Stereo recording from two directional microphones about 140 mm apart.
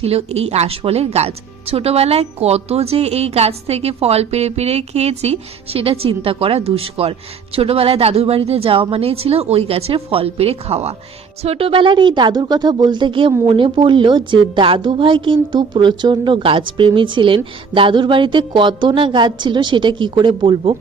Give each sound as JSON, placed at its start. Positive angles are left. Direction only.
{"t": 0.0, "sound": "a woman's voice", "side_deg": -45}